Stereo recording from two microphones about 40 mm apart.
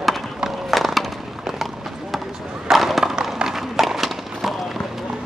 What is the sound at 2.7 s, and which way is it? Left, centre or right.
Skateboard, centre.